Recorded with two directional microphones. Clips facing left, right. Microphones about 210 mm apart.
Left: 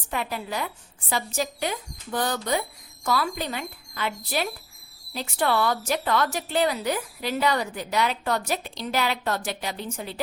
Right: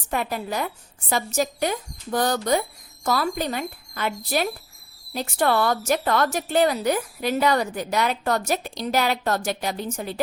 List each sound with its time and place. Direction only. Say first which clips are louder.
0.1 s a woman's voice: right 3 dB; 45° right (ahead or behind)